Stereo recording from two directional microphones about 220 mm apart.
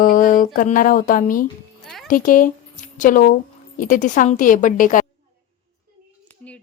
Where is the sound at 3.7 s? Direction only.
35° left (ahead or behind).